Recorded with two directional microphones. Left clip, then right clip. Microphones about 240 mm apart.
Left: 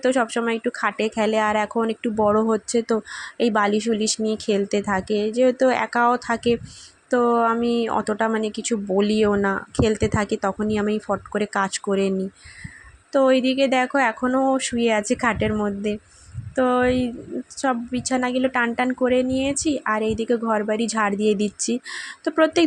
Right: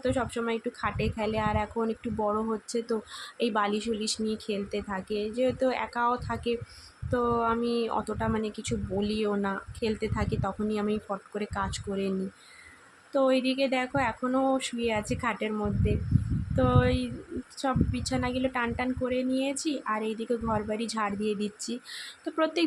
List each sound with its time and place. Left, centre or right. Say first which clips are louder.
0.0 s speech: left 9 dB; left
13.1 s speech: left 7 dB; left